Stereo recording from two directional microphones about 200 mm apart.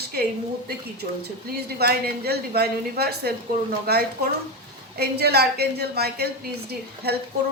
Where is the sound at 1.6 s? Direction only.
50° right (ahead or behind).